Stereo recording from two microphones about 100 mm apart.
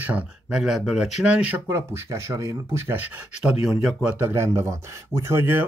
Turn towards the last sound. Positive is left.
turn(degrees=-20)  # may be behind; listen again after turning